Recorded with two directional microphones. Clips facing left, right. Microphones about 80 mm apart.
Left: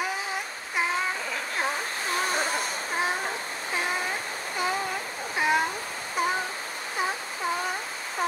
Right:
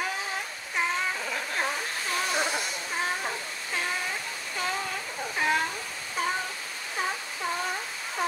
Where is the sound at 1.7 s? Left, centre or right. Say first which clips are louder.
Left 2 dB; left.